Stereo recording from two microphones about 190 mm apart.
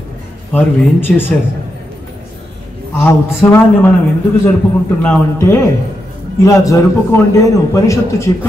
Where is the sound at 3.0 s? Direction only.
10° left (ahead or behind).